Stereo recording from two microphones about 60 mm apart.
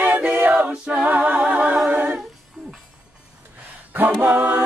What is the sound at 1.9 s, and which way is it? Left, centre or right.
A capella, right.